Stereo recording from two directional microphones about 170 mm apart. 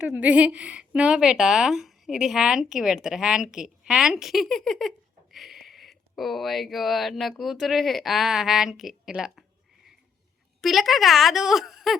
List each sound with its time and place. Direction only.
0.0 s a woman's voice: 10° right (ahead or behind)
10.6 s a woman's voice: centre (ahead or behind)